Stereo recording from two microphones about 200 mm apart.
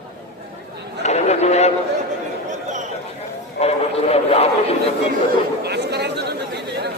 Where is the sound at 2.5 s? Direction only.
35° right (ahead or behind).